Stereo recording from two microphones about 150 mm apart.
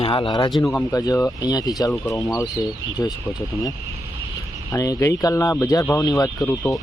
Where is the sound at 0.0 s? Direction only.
35° left (ahead or behind).